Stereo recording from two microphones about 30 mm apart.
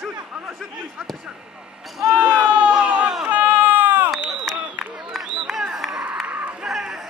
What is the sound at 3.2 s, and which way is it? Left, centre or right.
Baby cry, right.